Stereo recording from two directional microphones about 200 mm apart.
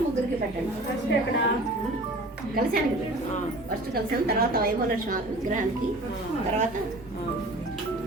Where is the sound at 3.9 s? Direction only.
50° right (ahead or behind).